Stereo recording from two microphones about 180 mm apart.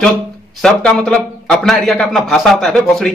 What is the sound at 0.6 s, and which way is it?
A man's voice, centre (ahead or behind).